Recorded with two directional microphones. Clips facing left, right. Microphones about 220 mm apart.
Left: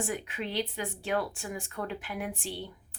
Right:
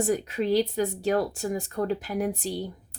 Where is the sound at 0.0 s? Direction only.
40° right (ahead or behind).